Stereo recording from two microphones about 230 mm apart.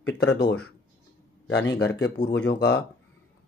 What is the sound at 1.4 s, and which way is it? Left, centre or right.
Speech, left.